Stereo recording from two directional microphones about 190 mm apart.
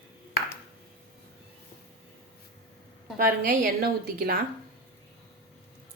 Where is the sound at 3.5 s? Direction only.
50° right (ahead or behind).